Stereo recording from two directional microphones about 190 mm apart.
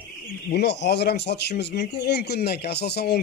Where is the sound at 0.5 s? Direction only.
60° left (ahead or behind).